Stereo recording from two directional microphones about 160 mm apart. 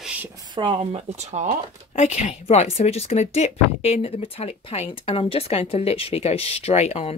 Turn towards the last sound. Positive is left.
turn(degrees=40)  # may be behind; listen again after turning